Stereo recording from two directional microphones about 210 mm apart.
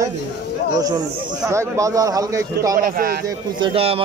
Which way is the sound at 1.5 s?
15° right (ahead or behind).